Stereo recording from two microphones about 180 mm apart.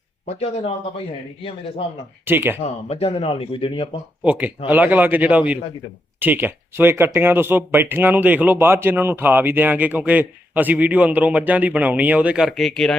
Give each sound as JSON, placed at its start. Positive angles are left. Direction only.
{"t": 0.3, "sound": "speech", "side_deg": 40}
{"t": 2.2, "sound": "speech", "side_deg": -10}
{"t": 2.6, "sound": "speech", "side_deg": 35}
{"t": 4.2, "sound": "speech", "side_deg": -10}